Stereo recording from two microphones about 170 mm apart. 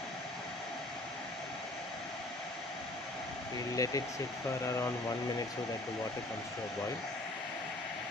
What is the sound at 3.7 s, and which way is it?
Speech, 20° left (ahead or behind).